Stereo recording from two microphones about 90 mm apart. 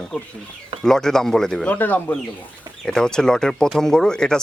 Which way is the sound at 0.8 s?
5° left (ahead or behind).